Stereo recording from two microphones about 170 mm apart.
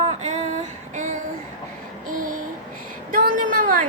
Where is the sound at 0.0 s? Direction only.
40° right (ahead or behind).